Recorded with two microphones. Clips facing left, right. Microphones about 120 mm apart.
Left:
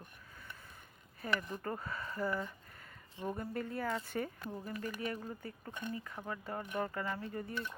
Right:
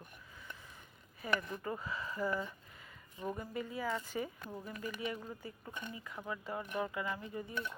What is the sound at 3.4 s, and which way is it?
Speech, 55° left (ahead or behind).